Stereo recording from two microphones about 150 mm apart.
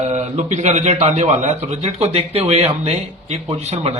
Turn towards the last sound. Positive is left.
turn(degrees=-45)  # may be behind; listen again after turning